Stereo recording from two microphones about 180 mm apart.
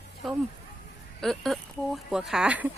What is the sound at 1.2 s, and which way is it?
Speech, centre (ahead or behind).